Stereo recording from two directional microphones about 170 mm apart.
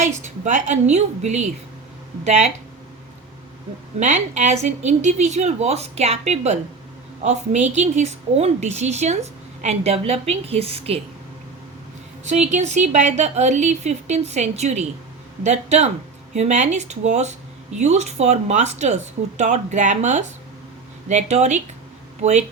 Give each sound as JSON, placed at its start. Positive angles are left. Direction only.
{"t": 0.0, "sound": "a woman's voice", "side_deg": -45}
{"t": 4.0, "sound": "a woman's voice", "side_deg": -45}
{"t": 12.2, "sound": "a woman's voice", "side_deg": -40}